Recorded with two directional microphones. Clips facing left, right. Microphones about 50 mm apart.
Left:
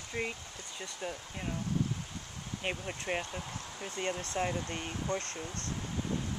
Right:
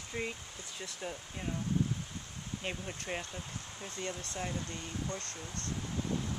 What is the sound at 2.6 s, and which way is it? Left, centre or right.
Speech, left.